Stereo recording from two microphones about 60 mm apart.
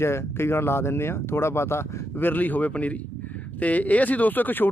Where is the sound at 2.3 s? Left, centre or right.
Left.